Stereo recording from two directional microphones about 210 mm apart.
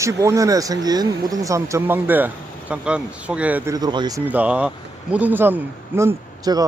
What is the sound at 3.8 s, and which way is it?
Speech, 20° right (ahead or behind).